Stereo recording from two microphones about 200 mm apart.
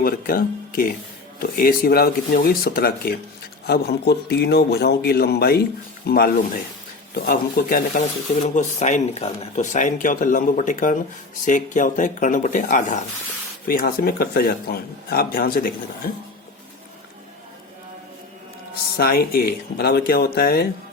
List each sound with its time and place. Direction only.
0.0 s speech: 45° left (ahead or behind)
13.7 s speech: 50° left (ahead or behind)
18.9 s speech: 50° left (ahead or behind)